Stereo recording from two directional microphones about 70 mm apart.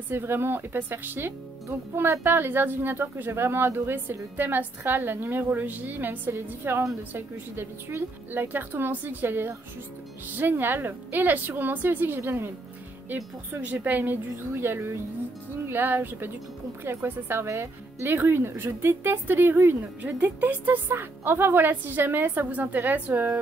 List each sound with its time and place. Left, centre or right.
0.1 s speech: right
13.1 s speech: right